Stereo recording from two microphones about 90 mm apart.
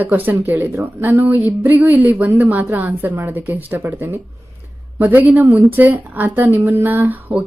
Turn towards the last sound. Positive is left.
turn(degrees=-20)  # may be behind; listen again after turning